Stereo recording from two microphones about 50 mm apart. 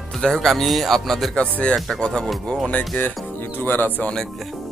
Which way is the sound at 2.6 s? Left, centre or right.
Left.